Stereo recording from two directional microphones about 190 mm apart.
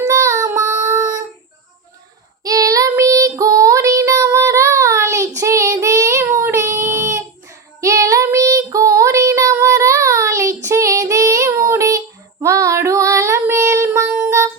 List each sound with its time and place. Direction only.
0.0 s child singing: 15° right (ahead or behind)
2.4 s child singing: 20° right (ahead or behind)